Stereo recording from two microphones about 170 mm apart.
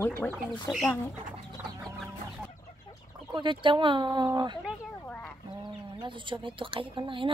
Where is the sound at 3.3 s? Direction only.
30° right (ahead or behind).